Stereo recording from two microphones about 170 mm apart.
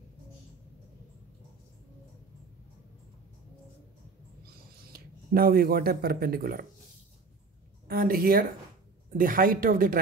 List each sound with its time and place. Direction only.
4.9 s speech: 60° right (ahead or behind)
7.9 s speech: 60° right (ahead or behind)